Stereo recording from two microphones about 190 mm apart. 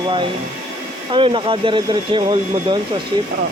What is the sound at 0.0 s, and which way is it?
Speech, 25° right (ahead or behind).